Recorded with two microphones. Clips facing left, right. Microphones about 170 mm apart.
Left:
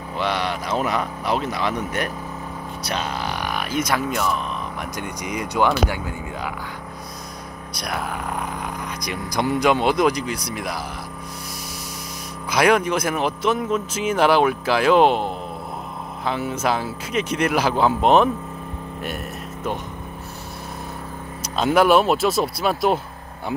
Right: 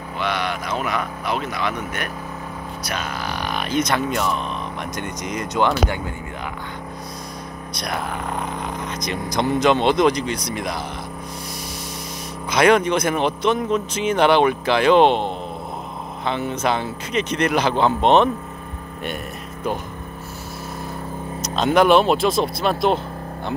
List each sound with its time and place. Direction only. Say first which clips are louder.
0.2 s speech: left 1 dB; 30° left (ahead or behind)
2.9 s speech: left 2 dB; 25° left (ahead or behind)
3.4 s speech: right 3 dB; 5° left (ahead or behind)
7.7 s speech: right 1 dB; 5° left (ahead or behind)
9.0 s speech: right 1 dB; 10° left (ahead or behind)
12.4 s speech: right 2 dB; 5° left (ahead or behind)
21.4 s speech: right 1 dB; 5° left (ahead or behind)